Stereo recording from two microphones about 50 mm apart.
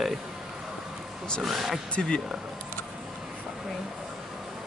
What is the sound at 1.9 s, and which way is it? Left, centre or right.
Speech, centre.